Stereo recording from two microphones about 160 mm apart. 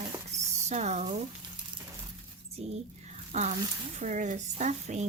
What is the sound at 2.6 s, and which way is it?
Squish, 40° right (ahead or behind).